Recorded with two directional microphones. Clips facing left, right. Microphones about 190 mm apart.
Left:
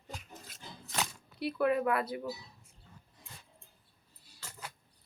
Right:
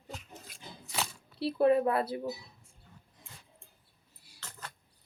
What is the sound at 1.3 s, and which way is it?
Speech, 30° right (ahead or behind).